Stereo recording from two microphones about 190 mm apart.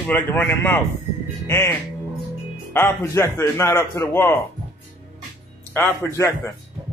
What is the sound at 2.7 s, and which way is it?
Speech, 15° left (ahead or behind).